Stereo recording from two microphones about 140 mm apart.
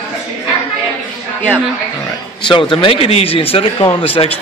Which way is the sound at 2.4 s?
35° left (ahead or behind).